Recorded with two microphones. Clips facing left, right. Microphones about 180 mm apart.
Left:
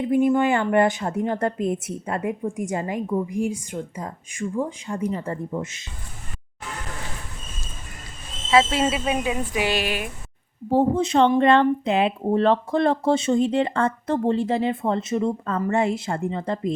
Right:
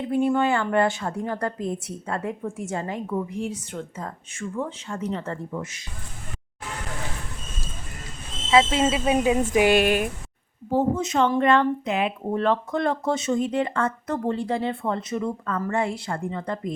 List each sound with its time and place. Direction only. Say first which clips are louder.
0.1 s a woman's voice: left 2 dB; 15° left (ahead or behind)
8.4 s speech: even; 20° right (ahead or behind)
9.5 s speech: right 6 dB; 50° right (ahead or behind)
10.7 s speech: left 3 dB; 35° left (ahead or behind)